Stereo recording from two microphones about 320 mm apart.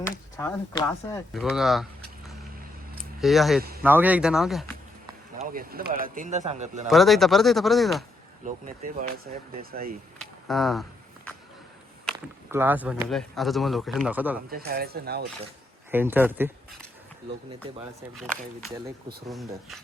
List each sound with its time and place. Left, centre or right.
0.3 s speech: centre
1.3 s speech: centre
5.4 s speech: right
6.8 s speech: centre
8.4 s speech: right
10.2 s a sound: centre
12.0 s speech: centre
14.5 s speech: right
15.9 s speech: centre
18.2 s speech: centre